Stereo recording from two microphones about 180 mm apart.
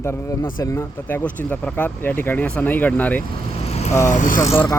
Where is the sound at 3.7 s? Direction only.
35° left (ahead or behind).